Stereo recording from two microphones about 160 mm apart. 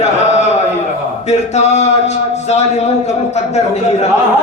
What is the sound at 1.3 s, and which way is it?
A man's voice, 45° left (ahead or behind).